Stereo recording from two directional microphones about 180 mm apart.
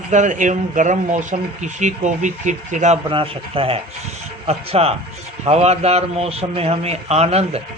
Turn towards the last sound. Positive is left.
turn(degrees=-35)  # may be behind; listen again after turning